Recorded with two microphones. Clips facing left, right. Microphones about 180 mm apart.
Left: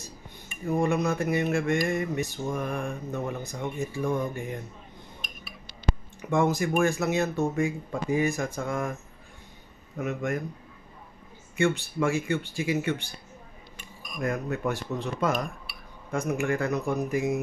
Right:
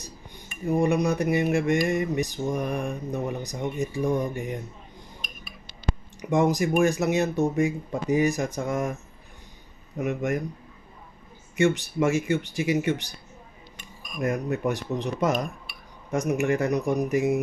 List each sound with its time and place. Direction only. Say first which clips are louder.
0.7 s speech: right 3 dB; 15° right (ahead or behind)
6.3 s speech: right 2 dB; 20° right (ahead or behind)
9.9 s speech: right 3 dB; 15° right (ahead or behind)
11.5 s speech: right 3 dB; 20° right (ahead or behind)
14.2 s speech: right 3 dB; 20° right (ahead or behind)